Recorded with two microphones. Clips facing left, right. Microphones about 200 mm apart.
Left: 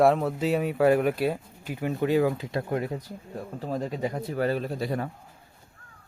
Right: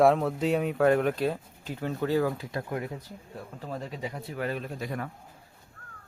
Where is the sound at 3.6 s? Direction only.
40° left (ahead or behind).